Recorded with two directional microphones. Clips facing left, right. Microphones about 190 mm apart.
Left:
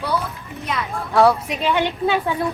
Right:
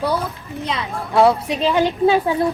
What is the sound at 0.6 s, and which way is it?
A woman's voice, 30° right (ahead or behind).